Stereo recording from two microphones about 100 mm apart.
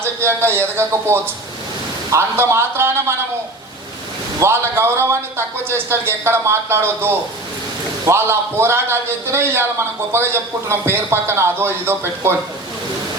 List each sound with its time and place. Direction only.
0.0 s speech: 25° right (ahead or behind)
4.4 s speech: 25° right (ahead or behind)